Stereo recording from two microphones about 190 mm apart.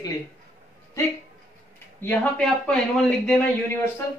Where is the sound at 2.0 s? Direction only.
5° left (ahead or behind).